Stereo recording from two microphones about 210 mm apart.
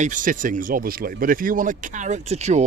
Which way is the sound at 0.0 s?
40° right (ahead or behind).